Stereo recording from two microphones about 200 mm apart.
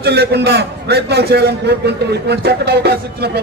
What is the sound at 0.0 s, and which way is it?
A man's voice, 55° right (ahead or behind).